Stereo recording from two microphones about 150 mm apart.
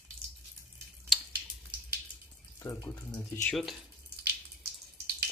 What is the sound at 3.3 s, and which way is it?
Speech, 10° left (ahead or behind).